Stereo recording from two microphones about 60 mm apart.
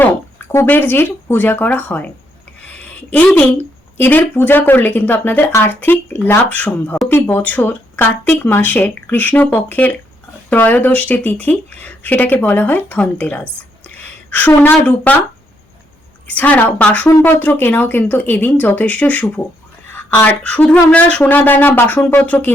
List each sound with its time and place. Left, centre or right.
0.0 s a woman's voice: left
6.4 s speech: left
13.6 s a sound: left
16.2 s speech: left